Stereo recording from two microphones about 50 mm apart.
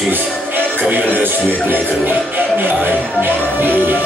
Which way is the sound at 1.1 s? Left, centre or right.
Right.